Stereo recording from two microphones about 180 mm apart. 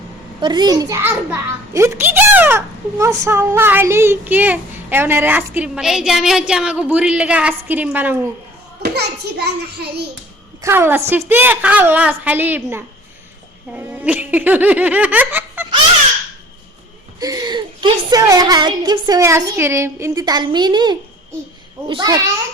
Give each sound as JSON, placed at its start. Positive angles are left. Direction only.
{"t": 0.4, "sound": "a child's voice", "side_deg": -25}
{"t": 8.8, "sound": "a child's voice", "side_deg": -65}
{"t": 10.6, "sound": "a child's voice", "side_deg": -15}
{"t": 13.7, "sound": "laughter", "side_deg": -10}
{"t": 17.2, "sound": "speech", "side_deg": -20}